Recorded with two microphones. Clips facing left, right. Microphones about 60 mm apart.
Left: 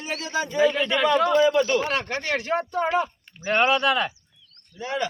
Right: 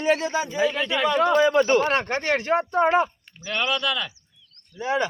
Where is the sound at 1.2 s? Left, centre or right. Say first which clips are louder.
Right 1 dB; right.